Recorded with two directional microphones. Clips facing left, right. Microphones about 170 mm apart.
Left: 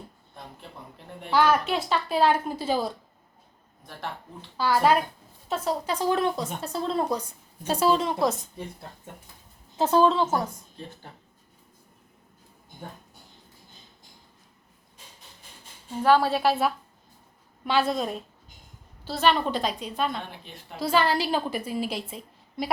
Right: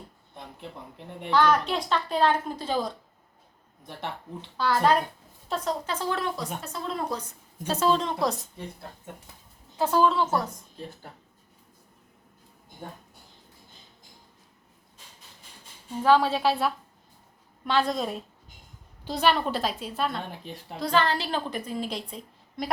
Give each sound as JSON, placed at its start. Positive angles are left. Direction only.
{"t": 1.3, "sound": "a woman's voice", "side_deg": 5}
{"t": 4.5, "sound": "a woman's voice", "side_deg": 5}
{"t": 6.6, "sound": "speech", "side_deg": 30}
{"t": 7.7, "sound": "a woman's voice", "side_deg": 10}
{"t": 9.7, "sound": "speech", "side_deg": 20}
{"t": 16.0, "sound": "a woman's voice", "side_deg": 10}
{"t": 19.0, "sound": "a woman's voice", "side_deg": -15}
{"t": 19.3, "sound": "a woman's voice", "side_deg": -5}
{"t": 20.4, "sound": "a woman's voice", "side_deg": -40}
{"t": 20.7, "sound": "a woman's voice", "side_deg": 10}